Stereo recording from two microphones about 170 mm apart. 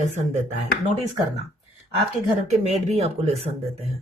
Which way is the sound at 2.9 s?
40° right (ahead or behind).